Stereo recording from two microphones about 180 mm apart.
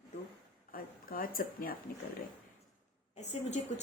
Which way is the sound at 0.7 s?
55° left (ahead or behind).